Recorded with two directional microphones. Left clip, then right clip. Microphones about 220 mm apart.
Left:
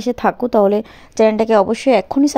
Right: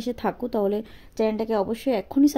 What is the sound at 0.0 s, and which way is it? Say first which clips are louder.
A woman's voice: left 10 dB; 30° left (ahead or behind).